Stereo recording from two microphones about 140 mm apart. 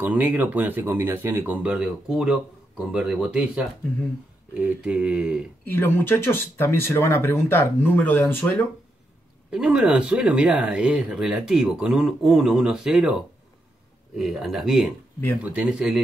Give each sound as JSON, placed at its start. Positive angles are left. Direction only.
{"t": 0.0, "sound": "speech", "side_deg": -15}
{"t": 5.7, "sound": "speech", "side_deg": 15}
{"t": 9.5, "sound": "speech", "side_deg": -5}